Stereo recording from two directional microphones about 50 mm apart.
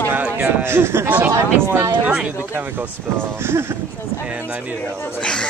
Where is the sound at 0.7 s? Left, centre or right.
Right.